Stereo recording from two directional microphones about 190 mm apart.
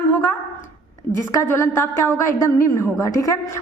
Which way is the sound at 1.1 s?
15° left (ahead or behind).